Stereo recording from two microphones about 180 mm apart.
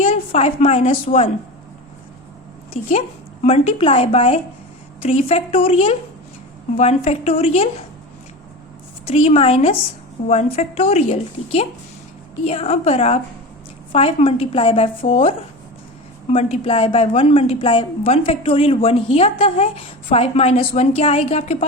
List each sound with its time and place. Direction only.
0.0 s a woman's voice: 35° left (ahead or behind)
2.8 s a woman's voice: 35° left (ahead or behind)
9.0 s a woman's voice: 35° left (ahead or behind)